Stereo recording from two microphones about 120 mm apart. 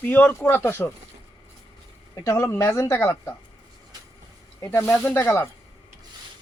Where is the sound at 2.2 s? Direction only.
25° left (ahead or behind).